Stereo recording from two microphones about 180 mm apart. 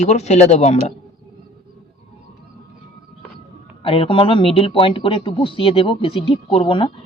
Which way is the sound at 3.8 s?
30° left (ahead or behind).